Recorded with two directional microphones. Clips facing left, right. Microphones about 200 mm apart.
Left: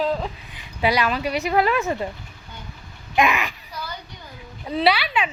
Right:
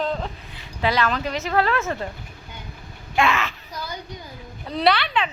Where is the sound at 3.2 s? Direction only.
15° left (ahead or behind).